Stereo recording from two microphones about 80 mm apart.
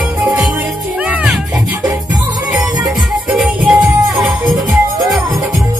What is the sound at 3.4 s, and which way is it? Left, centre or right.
Music, centre.